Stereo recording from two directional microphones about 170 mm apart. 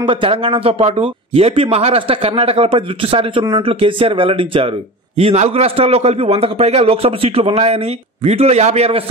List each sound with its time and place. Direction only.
0.0 s a man's voice: 30° right (ahead or behind)